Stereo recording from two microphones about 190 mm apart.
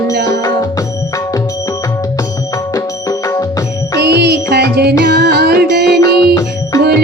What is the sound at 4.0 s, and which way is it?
Music, 60° right (ahead or behind).